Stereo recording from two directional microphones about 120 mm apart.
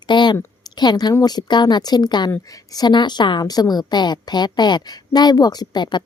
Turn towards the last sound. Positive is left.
turn(degrees=40)  # may be behind; listen again after turning